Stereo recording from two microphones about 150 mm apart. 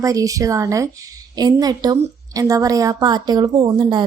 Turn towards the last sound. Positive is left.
turn(degrees=-30)  # may be behind; listen again after turning